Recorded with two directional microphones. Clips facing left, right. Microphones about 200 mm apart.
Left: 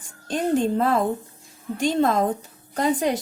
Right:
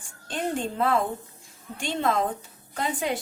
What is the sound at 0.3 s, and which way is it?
A woman's voice, 40° left (ahead or behind).